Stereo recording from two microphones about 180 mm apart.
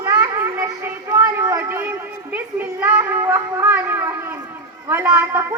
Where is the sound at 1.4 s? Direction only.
15° right (ahead or behind).